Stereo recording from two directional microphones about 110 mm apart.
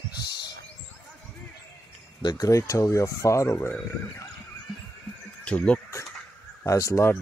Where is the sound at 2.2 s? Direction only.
35° left (ahead or behind).